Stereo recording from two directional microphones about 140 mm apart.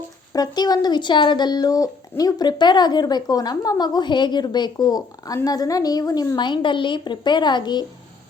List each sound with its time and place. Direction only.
0.3 s speech: 30° left (ahead or behind)